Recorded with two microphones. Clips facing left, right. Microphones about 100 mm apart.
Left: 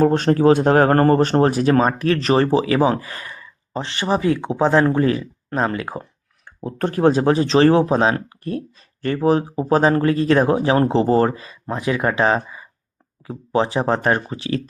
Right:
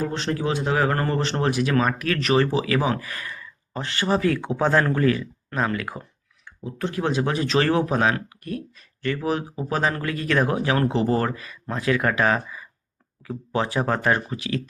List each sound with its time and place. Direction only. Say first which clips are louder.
0.0 s speech: left 11 dB; 50° left (ahead or behind); by 6.1 s 25° left (ahead or behind)
6.4 s speech: left 6 dB; 45° left (ahead or behind)